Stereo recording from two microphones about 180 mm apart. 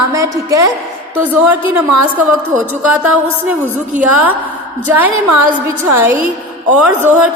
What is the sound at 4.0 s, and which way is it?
Speech, 10° right (ahead or behind).